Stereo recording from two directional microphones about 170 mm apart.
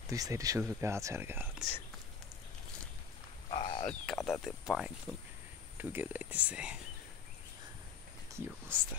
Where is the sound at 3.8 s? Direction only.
5° left (ahead or behind).